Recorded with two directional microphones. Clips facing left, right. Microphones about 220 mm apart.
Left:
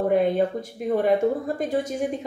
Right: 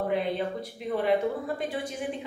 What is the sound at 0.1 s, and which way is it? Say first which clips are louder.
A woman's voice: left 7 dB; 50° left (ahead or behind).